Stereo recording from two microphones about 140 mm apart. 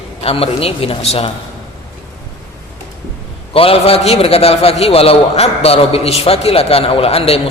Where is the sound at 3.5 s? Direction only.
45° left (ahead or behind).